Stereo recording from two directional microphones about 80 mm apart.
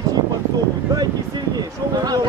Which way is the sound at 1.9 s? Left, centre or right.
Right.